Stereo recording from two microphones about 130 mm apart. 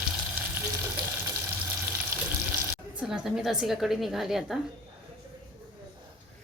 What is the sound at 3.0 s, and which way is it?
A woman's voice, 5° right (ahead or behind).